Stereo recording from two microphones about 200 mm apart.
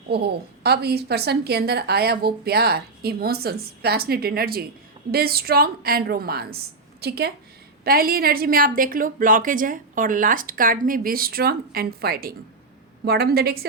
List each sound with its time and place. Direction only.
0.1 s a woman's voice: 55° right (ahead or behind)